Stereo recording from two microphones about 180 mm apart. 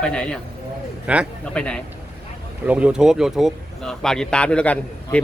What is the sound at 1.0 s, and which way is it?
Speech, 5° right (ahead or behind).